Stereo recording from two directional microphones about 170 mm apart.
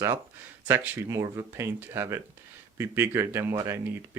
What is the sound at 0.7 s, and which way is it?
Speech, 15° right (ahead or behind).